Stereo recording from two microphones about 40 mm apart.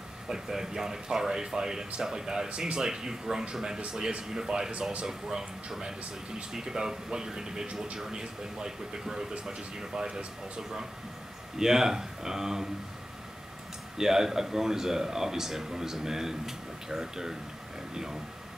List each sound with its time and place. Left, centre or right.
0.3 s speech: centre
11.5 s speech: centre
13.9 s speech: centre